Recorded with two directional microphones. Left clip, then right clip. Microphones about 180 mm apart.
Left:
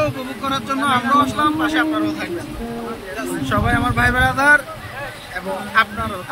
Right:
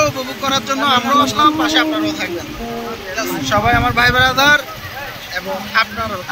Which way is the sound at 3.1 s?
10° left (ahead or behind).